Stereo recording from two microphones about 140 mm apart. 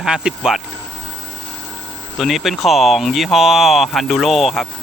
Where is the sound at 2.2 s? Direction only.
Centre (ahead or behind).